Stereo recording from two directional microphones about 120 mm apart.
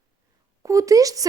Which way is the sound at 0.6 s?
25° right (ahead or behind).